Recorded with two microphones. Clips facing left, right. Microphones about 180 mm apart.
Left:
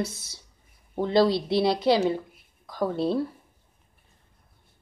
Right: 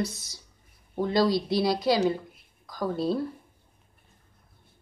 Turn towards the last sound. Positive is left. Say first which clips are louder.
# left 2 dB
turn(degrees=25)  # may be behind; listen again after turning